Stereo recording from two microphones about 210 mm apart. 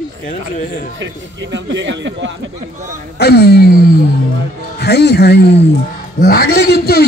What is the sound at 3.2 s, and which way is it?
A man's voice, 50° left (ahead or behind).